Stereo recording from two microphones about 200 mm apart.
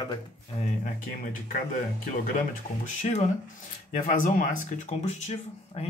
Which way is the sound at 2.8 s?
35° left (ahead or behind).